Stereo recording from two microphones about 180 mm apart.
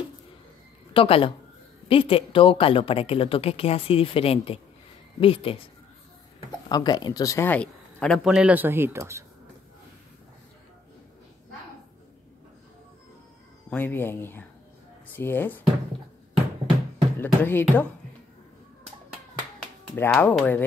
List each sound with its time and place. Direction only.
0.9 s a woman's voice: 30° left (ahead or behind)
6.7 s speech: 25° left (ahead or behind); by 9.2 s 15° right (ahead or behind)
13.7 s speech: 10° left (ahead or behind)
17.2 s speech: 10° left (ahead or behind)
19.8 s speech: 10° left (ahead or behind)